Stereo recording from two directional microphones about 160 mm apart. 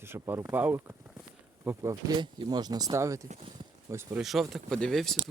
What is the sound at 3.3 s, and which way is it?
Speech, 35° right (ahead or behind).